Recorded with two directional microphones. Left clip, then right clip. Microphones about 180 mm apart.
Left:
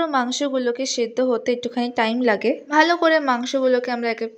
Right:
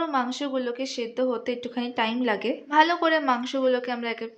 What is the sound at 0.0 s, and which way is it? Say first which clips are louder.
Speech: left 5 dB; 30° left (ahead or behind).